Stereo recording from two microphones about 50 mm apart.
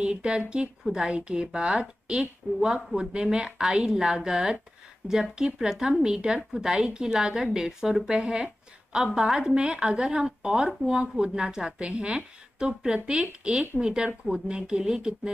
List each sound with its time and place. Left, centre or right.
0.0 s a woman's voice: centre